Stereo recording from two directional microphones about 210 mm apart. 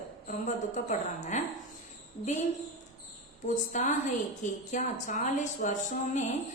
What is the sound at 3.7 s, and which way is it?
A woman's voice, 35° left (ahead or behind).